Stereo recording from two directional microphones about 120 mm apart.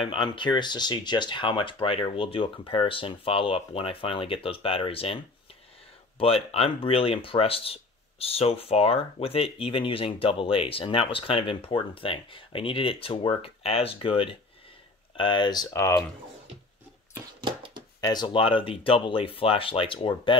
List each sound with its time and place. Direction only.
0.0 s speech: 45° left (ahead or behind); by 16.0 s 25° left (ahead or behind)
17.4 s a sound: 40° right (ahead or behind)
18.0 s speech: 40° left (ahead or behind)